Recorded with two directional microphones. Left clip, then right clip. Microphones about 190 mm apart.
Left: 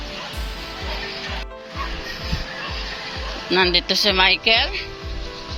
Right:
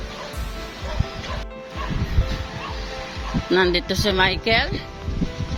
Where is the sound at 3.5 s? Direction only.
25° right (ahead or behind).